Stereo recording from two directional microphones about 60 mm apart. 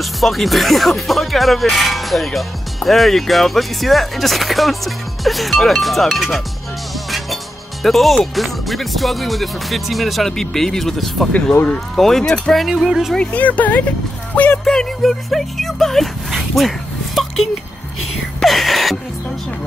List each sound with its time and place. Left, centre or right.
0.0 s speech: centre
7.8 s speech: centre
12.6 s speech: centre
13.2 s speech: left
14.6 s speech: centre
16.3 s a sound: centre